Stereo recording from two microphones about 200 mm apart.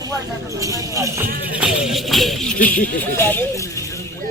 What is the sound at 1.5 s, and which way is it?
Music, 5° right (ahead or behind).